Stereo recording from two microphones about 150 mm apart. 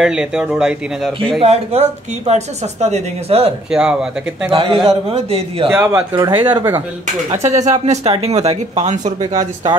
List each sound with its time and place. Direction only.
0.0 s speech: 5° right (ahead or behind)
1.4 s speech: 45° right (ahead or behind)
3.7 s speech: 5° right (ahead or behind)
4.5 s a man's voice: 35° right (ahead or behind)
5.8 s speech: 20° right (ahead or behind)
7.2 s speech: 50° right (ahead or behind)